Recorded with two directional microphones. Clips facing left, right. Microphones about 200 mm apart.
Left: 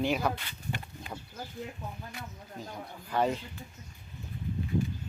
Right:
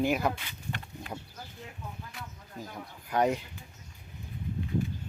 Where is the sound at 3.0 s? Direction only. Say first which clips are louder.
Right 2 dB; 15° right (ahead or behind).